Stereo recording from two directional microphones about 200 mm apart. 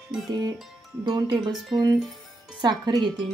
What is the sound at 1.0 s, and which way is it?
Speech, 20° right (ahead or behind).